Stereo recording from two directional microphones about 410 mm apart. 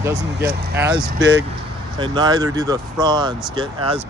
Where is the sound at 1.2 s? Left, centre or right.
Right.